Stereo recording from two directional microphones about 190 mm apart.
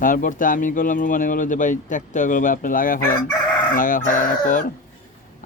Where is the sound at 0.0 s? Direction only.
45° left (ahead or behind).